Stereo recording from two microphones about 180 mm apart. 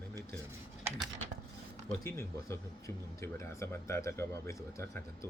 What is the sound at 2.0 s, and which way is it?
Speech, 15° left (ahead or behind).